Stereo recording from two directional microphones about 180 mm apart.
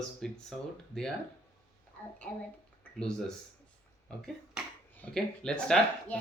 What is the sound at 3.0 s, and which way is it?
A child's voice, 5° left (ahead or behind).